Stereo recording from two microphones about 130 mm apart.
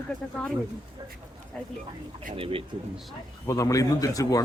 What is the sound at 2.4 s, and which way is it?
Speech, 45° right (ahead or behind).